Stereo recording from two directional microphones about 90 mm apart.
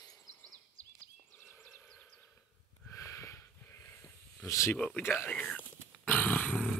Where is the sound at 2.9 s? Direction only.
35° left (ahead or behind).